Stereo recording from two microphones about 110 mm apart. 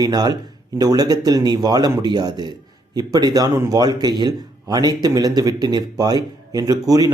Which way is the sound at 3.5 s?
25° right (ahead or behind).